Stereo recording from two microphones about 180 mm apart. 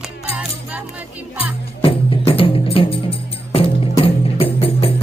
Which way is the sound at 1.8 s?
30° left (ahead or behind).